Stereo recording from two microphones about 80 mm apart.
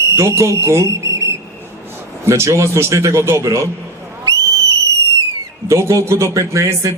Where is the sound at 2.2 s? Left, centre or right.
Right.